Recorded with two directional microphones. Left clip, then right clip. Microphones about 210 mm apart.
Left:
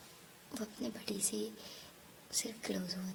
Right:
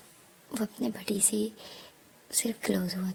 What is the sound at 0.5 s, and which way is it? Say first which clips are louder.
Speech: right 9 dB; 30° right (ahead or behind).